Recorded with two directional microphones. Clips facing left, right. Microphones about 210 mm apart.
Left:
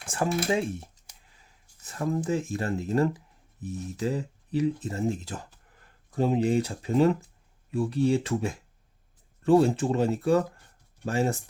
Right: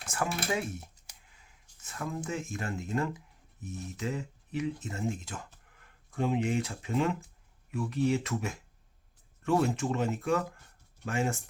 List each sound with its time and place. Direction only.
0.0 s speech: 30° left (ahead or behind)